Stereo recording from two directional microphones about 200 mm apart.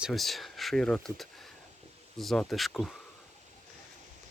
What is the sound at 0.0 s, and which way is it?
Speech, centre (ahead or behind).